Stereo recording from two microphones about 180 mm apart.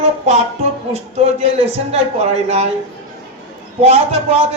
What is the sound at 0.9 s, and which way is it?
A man's voice, 35° right (ahead or behind).